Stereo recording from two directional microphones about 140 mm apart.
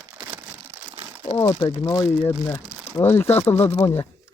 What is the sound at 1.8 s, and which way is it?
Speech, 25° left (ahead or behind).